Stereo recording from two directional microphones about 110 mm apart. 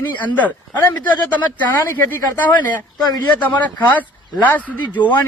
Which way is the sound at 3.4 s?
15° left (ahead or behind).